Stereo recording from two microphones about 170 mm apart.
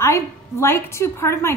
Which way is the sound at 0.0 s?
15° left (ahead or behind).